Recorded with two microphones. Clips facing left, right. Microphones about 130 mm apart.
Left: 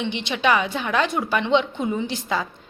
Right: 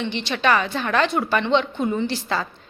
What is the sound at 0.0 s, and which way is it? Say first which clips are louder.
A woman's voice: even; 15° left (ahead or behind).